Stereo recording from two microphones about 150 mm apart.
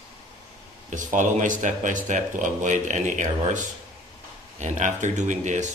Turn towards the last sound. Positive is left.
turn(degrees=-55)  # may be behind; listen again after turning